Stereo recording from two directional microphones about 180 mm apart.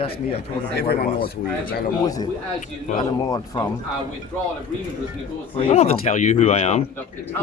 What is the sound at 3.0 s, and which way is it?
Speech, 20° left (ahead or behind).